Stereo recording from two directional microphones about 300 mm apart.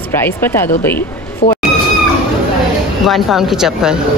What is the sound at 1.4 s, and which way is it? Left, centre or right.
Speech, left.